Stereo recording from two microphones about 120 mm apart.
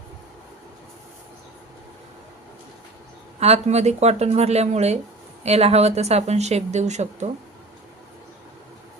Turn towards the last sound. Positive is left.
turn(degrees=-75)  # may be behind; listen again after turning